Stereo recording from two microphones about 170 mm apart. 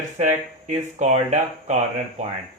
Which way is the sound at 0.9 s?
45° right (ahead or behind).